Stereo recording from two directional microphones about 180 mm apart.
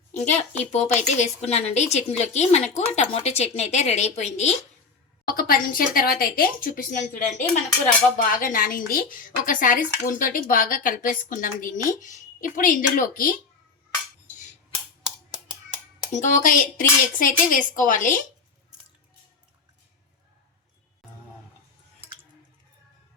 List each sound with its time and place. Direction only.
0.2 s speech: 40° left (ahead or behind)
5.3 s speech: 55° left (ahead or behind)
16.1 s speech: 45° left (ahead or behind)